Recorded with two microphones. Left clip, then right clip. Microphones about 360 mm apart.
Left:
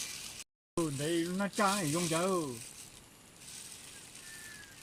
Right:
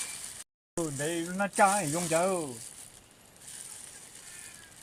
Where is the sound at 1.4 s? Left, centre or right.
Right.